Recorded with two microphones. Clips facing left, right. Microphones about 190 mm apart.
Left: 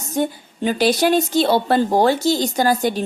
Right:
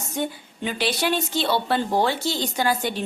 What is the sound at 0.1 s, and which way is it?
A woman's voice, 40° left (ahead or behind).